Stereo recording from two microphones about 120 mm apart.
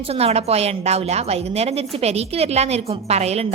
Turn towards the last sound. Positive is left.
turn(degrees=-60)  # may be behind; listen again after turning